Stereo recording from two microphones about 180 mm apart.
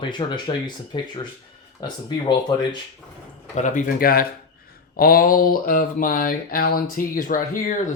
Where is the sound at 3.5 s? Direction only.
45° left (ahead or behind).